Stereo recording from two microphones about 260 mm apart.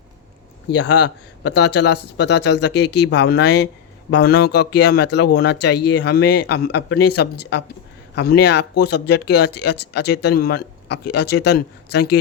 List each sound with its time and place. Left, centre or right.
0.7 s speech: left